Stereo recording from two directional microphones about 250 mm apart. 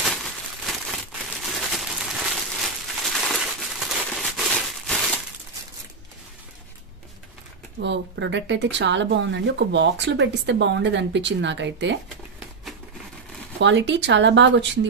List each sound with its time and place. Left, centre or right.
0.0 s a sound: centre
7.8 s speech: right
13.6 s speech: right